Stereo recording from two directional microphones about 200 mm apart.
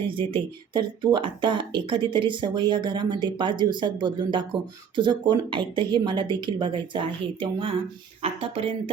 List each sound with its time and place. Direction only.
0.1 s speech: 25° right (ahead or behind)